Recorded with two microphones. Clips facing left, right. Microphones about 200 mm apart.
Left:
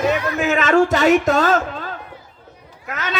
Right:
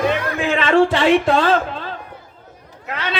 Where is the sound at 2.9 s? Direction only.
45° left (ahead or behind).